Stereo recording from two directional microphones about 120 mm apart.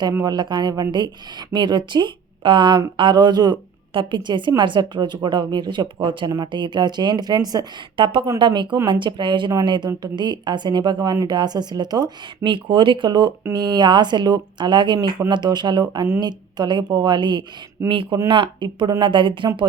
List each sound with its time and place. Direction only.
0.3 s speech: 40° right (ahead or behind)